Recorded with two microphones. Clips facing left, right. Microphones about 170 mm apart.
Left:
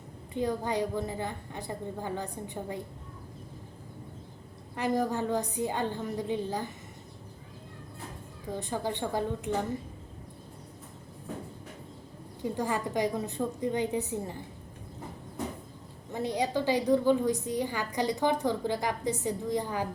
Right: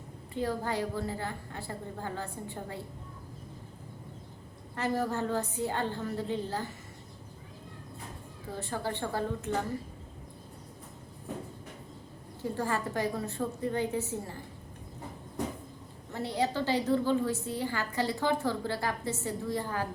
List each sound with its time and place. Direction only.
0.3 s a woman's voice: 15° left (ahead or behind)
4.7 s a woman's voice: 15° left (ahead or behind)
8.5 s a woman's voice: 15° left (ahead or behind)
12.4 s a woman's voice: 15° left (ahead or behind)
16.1 s a woman's voice: 15° left (ahead or behind)